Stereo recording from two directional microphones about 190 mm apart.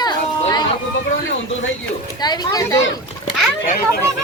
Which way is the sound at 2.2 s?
20° left (ahead or behind).